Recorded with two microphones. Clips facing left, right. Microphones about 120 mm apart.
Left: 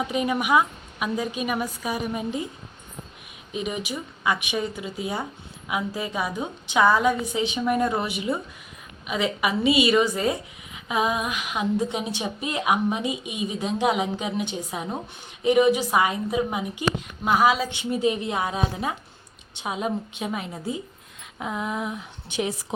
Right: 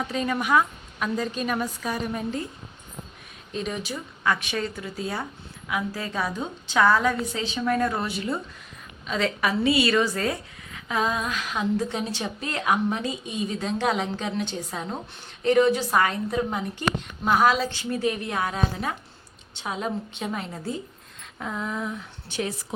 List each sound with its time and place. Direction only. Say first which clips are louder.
0.0 s speech: left 2 dB; 15° left (ahead or behind)
3.5 s a woman's voice: left 1 dB; 10° left (ahead or behind)
17.8 s a woman's voice: left 3 dB; 20° left (ahead or behind)